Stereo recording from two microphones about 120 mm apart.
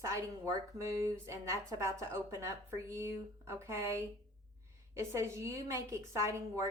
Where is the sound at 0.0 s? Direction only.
25° right (ahead or behind).